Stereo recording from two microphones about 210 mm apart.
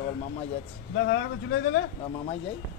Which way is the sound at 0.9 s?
60° left (ahead or behind).